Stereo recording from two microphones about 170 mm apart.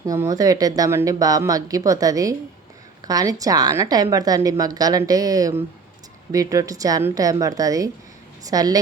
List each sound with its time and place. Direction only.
0.0 s a woman's voice: 20° right (ahead or behind)